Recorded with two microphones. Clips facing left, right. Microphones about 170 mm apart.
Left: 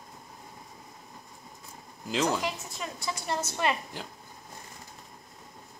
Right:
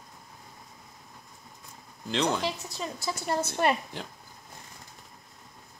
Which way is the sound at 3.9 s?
Centre (ahead or behind).